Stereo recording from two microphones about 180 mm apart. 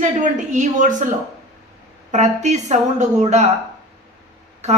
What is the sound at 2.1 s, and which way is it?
A woman's voice, 40° right (ahead or behind).